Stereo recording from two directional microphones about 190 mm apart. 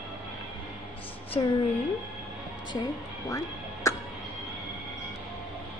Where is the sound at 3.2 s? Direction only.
15° left (ahead or behind).